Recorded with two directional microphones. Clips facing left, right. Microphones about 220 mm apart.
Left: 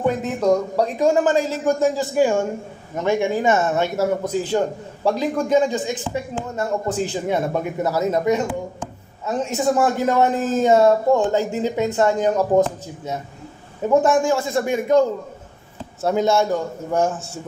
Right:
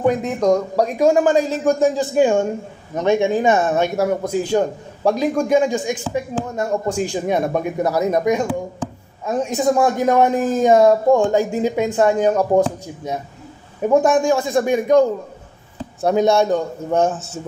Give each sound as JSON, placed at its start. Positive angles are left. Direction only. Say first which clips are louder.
{"t": 0.4, "sound": "a man's voice", "louder": "even", "side_deg": -10}